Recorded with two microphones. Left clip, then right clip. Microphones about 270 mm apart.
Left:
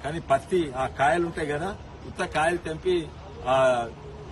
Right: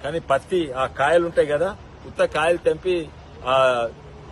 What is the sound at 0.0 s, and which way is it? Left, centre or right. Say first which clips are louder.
Speech: right 3 dB; right.